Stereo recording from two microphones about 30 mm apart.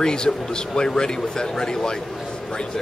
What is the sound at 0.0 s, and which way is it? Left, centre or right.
A man's voice, left.